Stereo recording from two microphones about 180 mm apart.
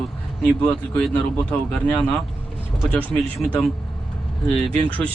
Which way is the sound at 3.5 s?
Centre (ahead or behind).